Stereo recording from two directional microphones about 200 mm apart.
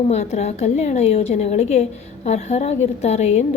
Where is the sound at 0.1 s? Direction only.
35° left (ahead or behind).